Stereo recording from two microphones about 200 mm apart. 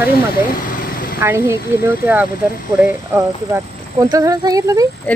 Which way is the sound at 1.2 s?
10° right (ahead or behind).